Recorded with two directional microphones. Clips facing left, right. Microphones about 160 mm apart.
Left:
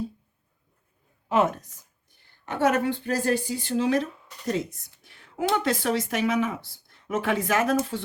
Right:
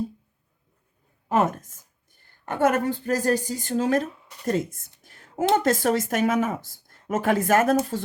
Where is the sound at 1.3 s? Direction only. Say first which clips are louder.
Even; 45° right (ahead or behind).